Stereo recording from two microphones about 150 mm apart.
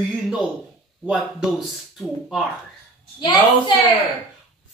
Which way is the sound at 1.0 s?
Centre (ahead or behind).